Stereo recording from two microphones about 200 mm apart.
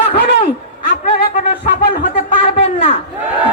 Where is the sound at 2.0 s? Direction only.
40° left (ahead or behind).